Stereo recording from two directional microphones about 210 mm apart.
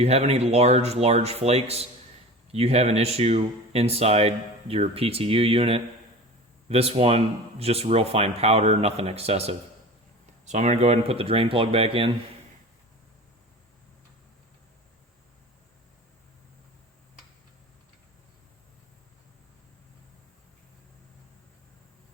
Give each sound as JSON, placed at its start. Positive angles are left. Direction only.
{"t": 0.0, "sound": "speech", "side_deg": -30}